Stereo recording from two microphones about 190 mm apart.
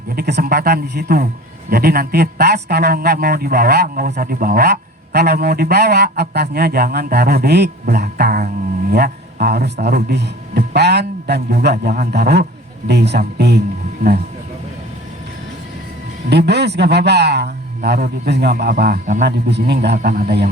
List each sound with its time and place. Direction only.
0.2 s a man's voice: 55° right (ahead or behind)
16.3 s a man's voice: 60° right (ahead or behind)